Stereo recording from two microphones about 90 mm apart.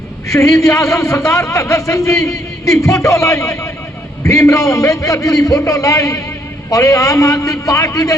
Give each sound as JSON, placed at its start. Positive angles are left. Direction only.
{"t": 0.3, "sound": "a man's voice", "side_deg": 40}